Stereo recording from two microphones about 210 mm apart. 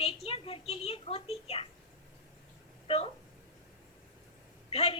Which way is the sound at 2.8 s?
30° left (ahead or behind).